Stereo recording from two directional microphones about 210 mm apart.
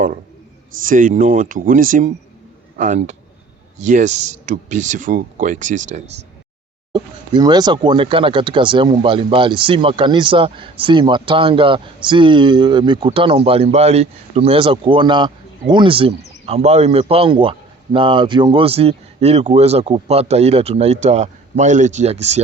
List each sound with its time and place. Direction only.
0.9 s speech: 40° right (ahead or behind)
6.9 s speech: 20° right (ahead or behind)